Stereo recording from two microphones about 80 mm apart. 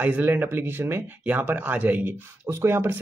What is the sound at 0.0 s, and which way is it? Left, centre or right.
Speech, right.